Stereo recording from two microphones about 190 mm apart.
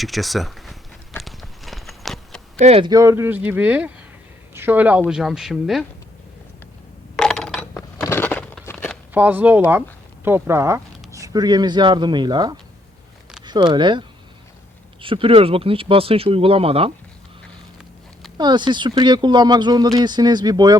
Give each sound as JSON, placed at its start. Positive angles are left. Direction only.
{"t": 0.0, "sound": "a sound", "side_deg": 0}
{"t": 2.6, "sound": "speech", "side_deg": -30}
{"t": 2.9, "sound": "a woman's voice", "side_deg": -15}
{"t": 7.2, "sound": "coin", "side_deg": 5}
{"t": 7.8, "sound": "a sound", "side_deg": 15}
{"t": 9.1, "sound": "speech", "side_deg": -10}
{"t": 15.0, "sound": "speech", "side_deg": -30}
{"t": 18.3, "sound": "speech", "side_deg": -25}